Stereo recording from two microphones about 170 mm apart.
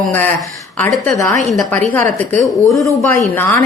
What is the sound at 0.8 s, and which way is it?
A woman's voice, 10° left (ahead or behind).